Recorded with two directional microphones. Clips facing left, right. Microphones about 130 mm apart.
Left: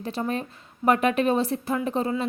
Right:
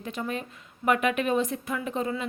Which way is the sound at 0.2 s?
35° left (ahead or behind).